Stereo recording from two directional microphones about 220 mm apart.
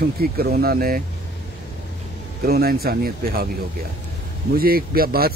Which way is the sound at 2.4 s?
45° right (ahead or behind).